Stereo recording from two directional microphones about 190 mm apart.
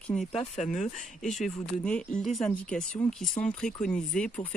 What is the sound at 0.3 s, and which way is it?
Speech, 35° left (ahead or behind).